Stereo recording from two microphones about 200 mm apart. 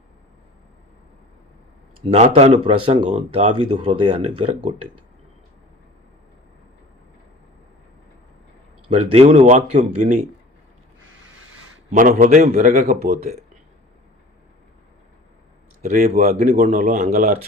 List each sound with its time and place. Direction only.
2.0 s speech: 30° right (ahead or behind)
8.9 s speech: 30° right (ahead or behind)
11.9 s speech: 40° right (ahead or behind)
15.8 s speech: 40° right (ahead or behind)